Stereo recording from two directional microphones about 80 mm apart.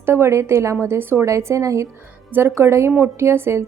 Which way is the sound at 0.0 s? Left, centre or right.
Right.